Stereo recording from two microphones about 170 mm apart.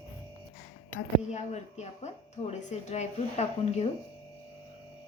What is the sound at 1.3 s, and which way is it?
A woman's voice, 40° left (ahead or behind).